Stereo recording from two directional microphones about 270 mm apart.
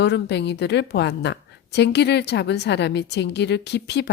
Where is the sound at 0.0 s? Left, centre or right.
Left.